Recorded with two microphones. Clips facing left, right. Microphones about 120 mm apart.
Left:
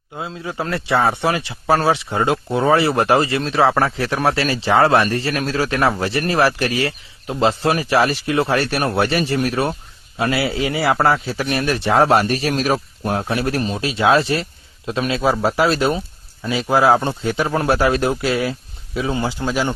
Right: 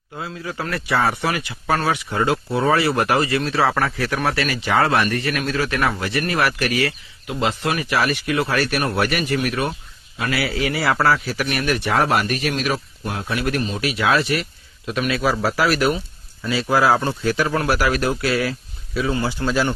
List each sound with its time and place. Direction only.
0.2 s speech: 25° left (ahead or behind)